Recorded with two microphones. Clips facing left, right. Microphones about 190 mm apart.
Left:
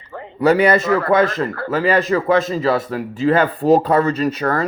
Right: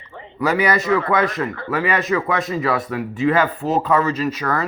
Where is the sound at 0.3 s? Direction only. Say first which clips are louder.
Left 5 dB; 30° left (ahead or behind).